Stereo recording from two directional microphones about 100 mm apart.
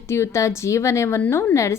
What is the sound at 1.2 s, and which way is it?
Speech, 15° left (ahead or behind).